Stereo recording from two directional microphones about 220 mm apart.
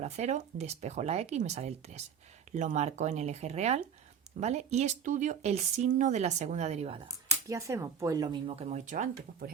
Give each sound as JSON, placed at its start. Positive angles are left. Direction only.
{"t": 0.0, "sound": "speech", "side_deg": -30}
{"t": 7.4, "sound": "speech", "side_deg": -15}